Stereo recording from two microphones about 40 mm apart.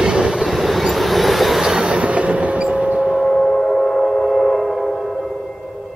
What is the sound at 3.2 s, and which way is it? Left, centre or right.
Gong, centre.